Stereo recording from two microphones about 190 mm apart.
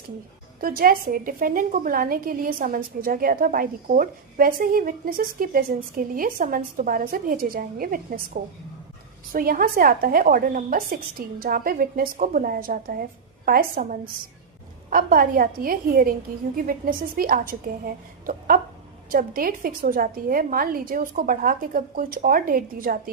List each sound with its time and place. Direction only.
0.6 s a woman's voice: 50° right (ahead or behind)